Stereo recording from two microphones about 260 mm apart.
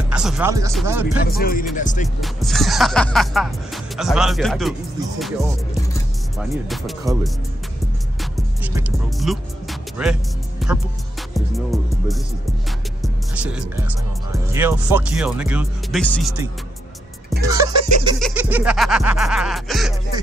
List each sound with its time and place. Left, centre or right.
0.1 s speech: centre
1.2 s speech: left
1.8 s music: left
2.1 s speech: centre
6.3 s speech: centre
8.2 s music: centre
13.0 s speech: centre
17.4 s music: centre
18.2 s speech: centre